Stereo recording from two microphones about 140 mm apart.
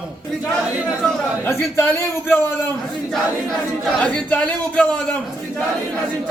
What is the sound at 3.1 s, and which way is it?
Speech, centre (ahead or behind).